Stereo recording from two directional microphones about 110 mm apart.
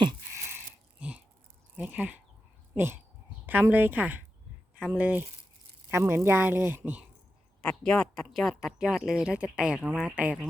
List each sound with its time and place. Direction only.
0.5 s a sound: 10° right (ahead or behind)
1.7 s a woman's voice: 15° right (ahead or behind)
7.6 s a woman's voice: 5° left (ahead or behind)